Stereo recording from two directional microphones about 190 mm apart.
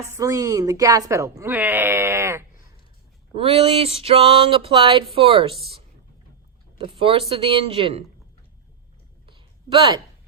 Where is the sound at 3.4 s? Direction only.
30° right (ahead or behind).